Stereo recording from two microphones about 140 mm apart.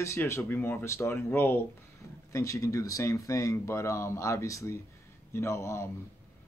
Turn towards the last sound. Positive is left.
turn(degrees=20)  # may be behind; listen again after turning